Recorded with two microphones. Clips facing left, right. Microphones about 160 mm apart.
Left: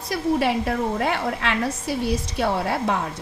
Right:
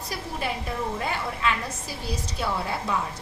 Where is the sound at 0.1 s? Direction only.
75° left (ahead or behind).